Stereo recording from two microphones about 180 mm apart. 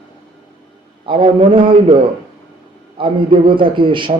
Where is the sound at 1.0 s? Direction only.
30° right (ahead or behind).